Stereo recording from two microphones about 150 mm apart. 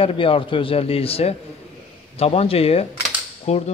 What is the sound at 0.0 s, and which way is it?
A man's voice, 35° left (ahead or behind).